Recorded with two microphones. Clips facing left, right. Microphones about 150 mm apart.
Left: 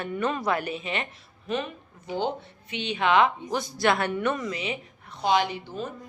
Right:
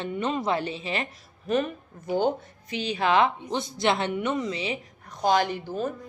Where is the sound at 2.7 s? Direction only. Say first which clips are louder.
Even; 35° right (ahead or behind).